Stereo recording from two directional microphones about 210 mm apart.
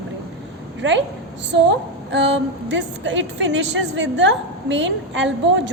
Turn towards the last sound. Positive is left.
turn(degrees=-60)  # may be behind; listen again after turning